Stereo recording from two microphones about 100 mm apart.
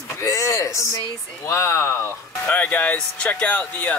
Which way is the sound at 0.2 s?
30° left (ahead or behind).